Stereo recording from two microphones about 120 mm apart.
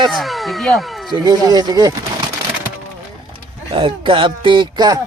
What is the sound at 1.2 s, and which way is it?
Speech, 35° right (ahead or behind).